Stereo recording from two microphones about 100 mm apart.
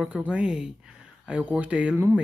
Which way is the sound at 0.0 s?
10° right (ahead or behind).